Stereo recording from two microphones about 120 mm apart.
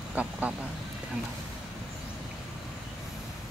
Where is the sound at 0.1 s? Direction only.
10° right (ahead or behind).